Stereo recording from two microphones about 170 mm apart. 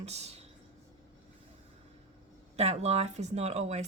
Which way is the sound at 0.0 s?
40° right (ahead or behind).